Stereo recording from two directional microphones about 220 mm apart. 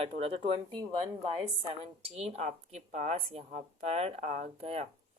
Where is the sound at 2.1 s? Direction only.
30° right (ahead or behind).